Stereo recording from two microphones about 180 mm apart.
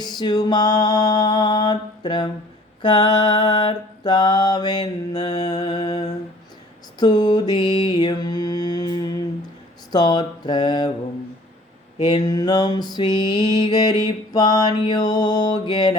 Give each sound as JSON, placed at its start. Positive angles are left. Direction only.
{"t": 0.0, "sound": "mantra", "side_deg": 25}
{"t": 12.0, "sound": "mantra", "side_deg": 25}